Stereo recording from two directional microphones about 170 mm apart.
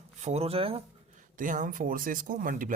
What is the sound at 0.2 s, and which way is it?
Speech, 40° right (ahead or behind).